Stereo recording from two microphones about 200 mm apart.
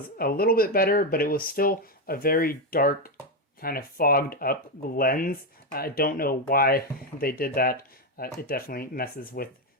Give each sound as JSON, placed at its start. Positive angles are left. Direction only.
{"t": 0.2, "sound": "speech", "side_deg": 50}